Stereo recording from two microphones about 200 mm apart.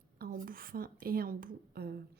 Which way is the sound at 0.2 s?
45° right (ahead or behind).